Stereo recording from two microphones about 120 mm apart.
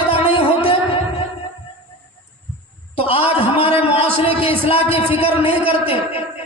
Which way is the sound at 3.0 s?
50° left (ahead or behind).